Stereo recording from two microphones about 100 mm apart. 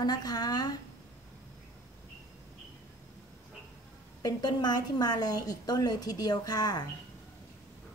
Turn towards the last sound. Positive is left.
turn(degrees=40)  # may be behind; listen again after turning